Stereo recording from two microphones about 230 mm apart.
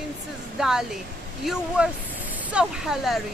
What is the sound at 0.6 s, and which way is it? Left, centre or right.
Speech, centre.